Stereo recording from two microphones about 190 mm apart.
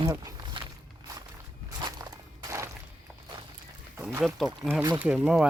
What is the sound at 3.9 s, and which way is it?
Speech, 10° right (ahead or behind).